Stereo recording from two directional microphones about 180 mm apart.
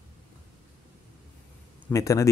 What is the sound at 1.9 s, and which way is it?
Speech, 15° left (ahead or behind).